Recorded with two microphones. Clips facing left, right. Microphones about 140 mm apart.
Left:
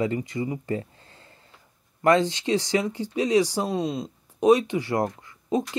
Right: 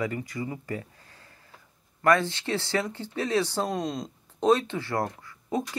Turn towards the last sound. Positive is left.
turn(degrees=20)  # may be behind; listen again after turning